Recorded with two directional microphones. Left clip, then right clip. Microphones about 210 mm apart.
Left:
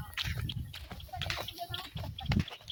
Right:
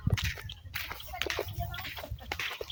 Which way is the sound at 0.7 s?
Centre (ahead or behind).